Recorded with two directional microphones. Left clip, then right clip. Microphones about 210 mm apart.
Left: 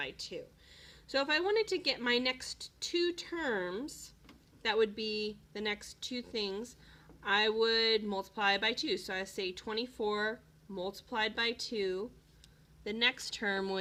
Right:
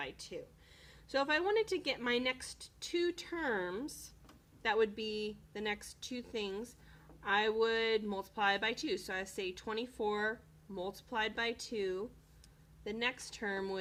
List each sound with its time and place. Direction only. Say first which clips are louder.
0.0 s a woman's voice: left 3 dB; 15° left (ahead or behind)